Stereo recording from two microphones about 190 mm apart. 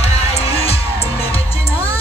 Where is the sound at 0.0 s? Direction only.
30° left (ahead or behind).